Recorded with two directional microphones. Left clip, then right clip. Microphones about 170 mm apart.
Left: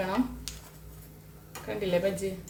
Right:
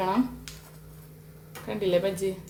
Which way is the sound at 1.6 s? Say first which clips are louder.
Right 3 dB; 40° right (ahead or behind).